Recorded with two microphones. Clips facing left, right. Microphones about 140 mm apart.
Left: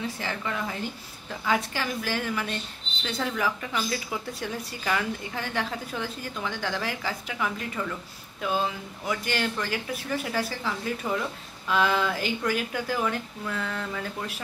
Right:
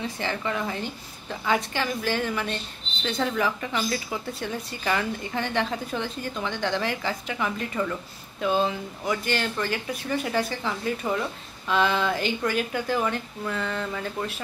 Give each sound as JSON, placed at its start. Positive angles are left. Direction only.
{"t": 0.2, "sound": "a woman's voice", "side_deg": 0}